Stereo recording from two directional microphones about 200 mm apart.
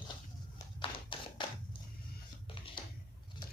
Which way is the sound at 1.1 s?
25° left (ahead or behind).